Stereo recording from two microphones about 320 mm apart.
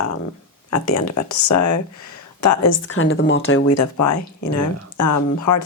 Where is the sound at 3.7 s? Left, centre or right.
Left.